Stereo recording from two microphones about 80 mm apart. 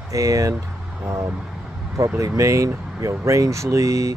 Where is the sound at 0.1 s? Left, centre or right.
Right.